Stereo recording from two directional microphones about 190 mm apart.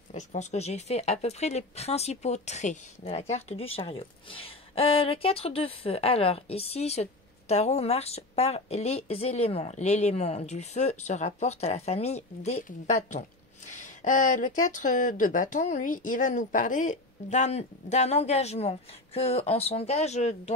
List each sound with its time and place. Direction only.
0.1 s speech: 40° left (ahead or behind)